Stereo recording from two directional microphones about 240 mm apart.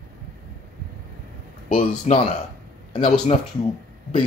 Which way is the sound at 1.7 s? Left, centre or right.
Left.